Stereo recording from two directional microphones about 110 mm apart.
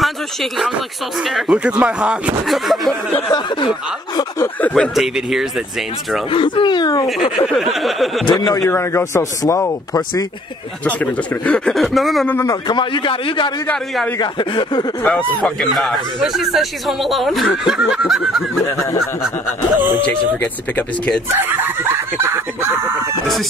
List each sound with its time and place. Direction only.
0.0 s a man's voice: centre (ahead or behind)
3.3 s a man's voice: 40° left (ahead or behind)
4.4 s speech: 15° left (ahead or behind)
4.7 s a man's voice: centre (ahead or behind)
6.3 s a man's voice: 50° left (ahead or behind)
7.2 s a man's voice: 50° left (ahead or behind)
7.4 s a man's voice: centre (ahead or behind)
8.3 s speech: 40° left (ahead or behind)
10.8 s speech: 10° left (ahead or behind)
11.7 s a man's voice: centre (ahead or behind)
12.4 s a man's voice: 40° left (ahead or behind)
15.4 s a man's voice: 5° left (ahead or behind)
20.3 s speech: 15° left (ahead or behind)
21.4 s speech: 20° right (ahead or behind)